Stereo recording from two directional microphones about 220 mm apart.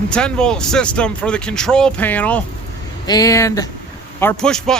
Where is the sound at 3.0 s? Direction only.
15° left (ahead or behind).